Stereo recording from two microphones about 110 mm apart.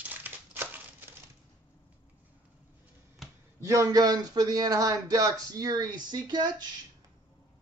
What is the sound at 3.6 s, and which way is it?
Speech, 30° right (ahead or behind).